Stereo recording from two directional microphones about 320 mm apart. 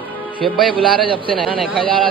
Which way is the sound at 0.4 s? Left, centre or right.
Centre.